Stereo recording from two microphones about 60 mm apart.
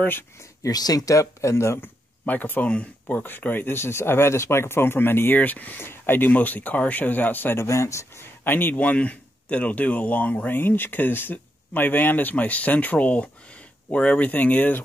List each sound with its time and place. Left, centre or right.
0.4 s speech: left
1.8 s speech: left
7.5 s speech: left
8.5 s speech: left